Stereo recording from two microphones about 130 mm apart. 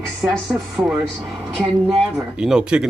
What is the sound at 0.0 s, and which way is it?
Speech, centre (ahead or behind).